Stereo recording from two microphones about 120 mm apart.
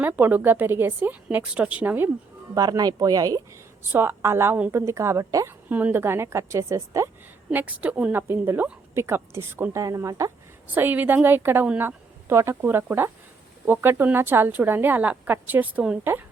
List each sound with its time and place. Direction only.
0.0 s speech: 15° right (ahead or behind)
2.6 s speech: 35° right (ahead or behind)
3.9 s a woman's voice: 20° right (ahead or behind)
5.6 s a woman's voice: 15° right (ahead or behind)
7.5 s a woman's voice: 10° right (ahead or behind)
10.8 s speech: 15° right (ahead or behind)